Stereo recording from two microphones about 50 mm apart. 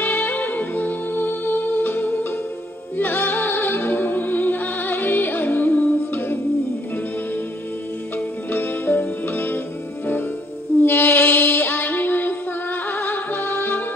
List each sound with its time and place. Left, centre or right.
0.0 s music: left
8.5 s music: left
10.8 s music: left